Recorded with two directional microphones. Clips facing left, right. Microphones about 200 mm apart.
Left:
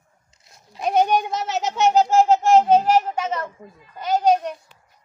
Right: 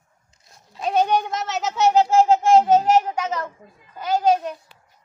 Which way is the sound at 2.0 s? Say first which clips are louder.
Even; centre (ahead or behind).